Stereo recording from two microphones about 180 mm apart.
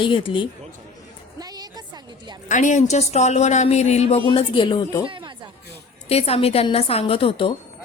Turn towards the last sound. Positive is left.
turn(degrees=30)  # may be behind; listen again after turning